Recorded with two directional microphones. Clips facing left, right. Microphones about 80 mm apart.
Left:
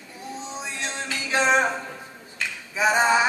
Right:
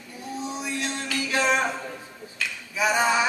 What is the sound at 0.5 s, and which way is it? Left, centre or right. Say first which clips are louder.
Music: left 1 dB; left.